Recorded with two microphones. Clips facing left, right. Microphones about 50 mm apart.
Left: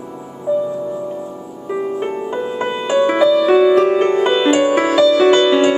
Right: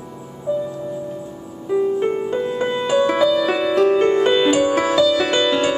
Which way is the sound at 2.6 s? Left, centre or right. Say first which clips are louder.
Left 3 dB; centre.